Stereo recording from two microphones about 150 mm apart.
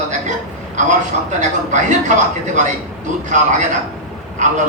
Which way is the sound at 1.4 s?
55° right (ahead or behind).